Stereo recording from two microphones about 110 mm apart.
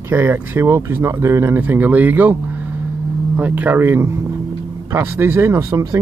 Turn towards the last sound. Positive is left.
turn(degrees=-30)  # may be behind; listen again after turning